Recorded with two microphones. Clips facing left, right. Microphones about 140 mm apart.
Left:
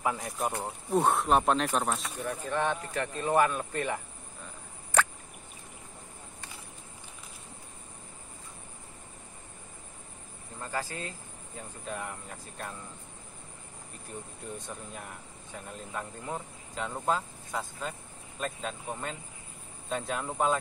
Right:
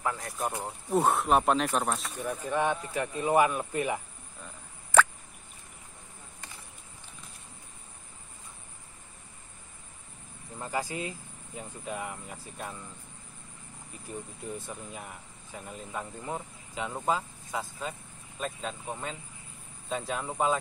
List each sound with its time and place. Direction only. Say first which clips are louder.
0.0 s speech: left 2 dB; 15° left (ahead or behind)
0.4 s speech: left 1 dB; 5° right (ahead or behind)
2.4 s speech: right 2 dB; 10° right (ahead or behind)
10.6 s speech: right 3 dB; 15° right (ahead or behind)
14.1 s speech: right 3 dB; 5° right (ahead or behind)